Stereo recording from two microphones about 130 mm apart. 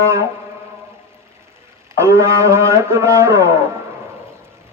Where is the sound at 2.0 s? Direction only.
20° right (ahead or behind).